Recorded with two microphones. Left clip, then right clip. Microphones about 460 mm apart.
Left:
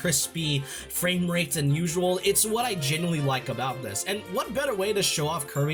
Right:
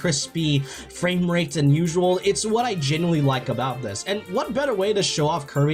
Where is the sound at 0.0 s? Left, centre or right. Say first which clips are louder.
Right 4 dB; left.